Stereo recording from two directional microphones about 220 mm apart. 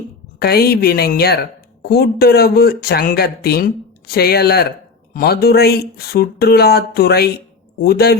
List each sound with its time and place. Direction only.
0.3 s a woman's voice: 45° left (ahead or behind)